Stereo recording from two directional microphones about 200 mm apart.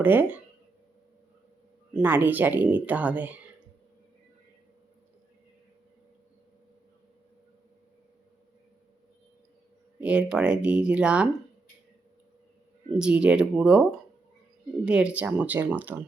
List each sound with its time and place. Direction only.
0.0 s speech: 10° right (ahead or behind)
1.9 s speech: 10° right (ahead or behind)
10.0 s speech: 5° right (ahead or behind)
13.0 s speech: 5° right (ahead or behind)
14.8 s speech: 5° right (ahead or behind)